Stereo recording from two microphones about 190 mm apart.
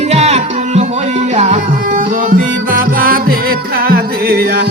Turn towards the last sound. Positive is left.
turn(degrees=-50)  # may be behind; listen again after turning